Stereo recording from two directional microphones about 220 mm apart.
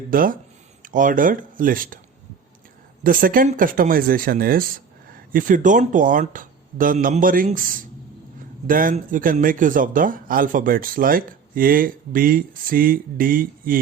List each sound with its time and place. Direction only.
0.1 s a man's voice: 40° right (ahead or behind)
3.0 s a man's voice: 40° right (ahead or behind)